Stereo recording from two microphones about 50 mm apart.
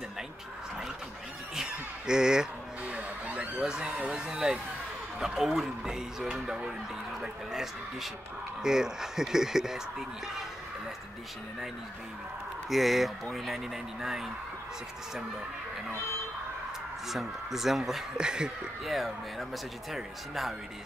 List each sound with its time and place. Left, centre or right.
1.5 s a sound: centre
2.9 s a sound: right
4.1 s speech: centre
12.6 s speech: centre
17.1 s speech: centre
18.1 s speech: centre
18.9 s speech: centre